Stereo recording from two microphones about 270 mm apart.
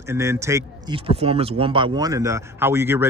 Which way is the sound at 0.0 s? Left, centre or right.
Centre.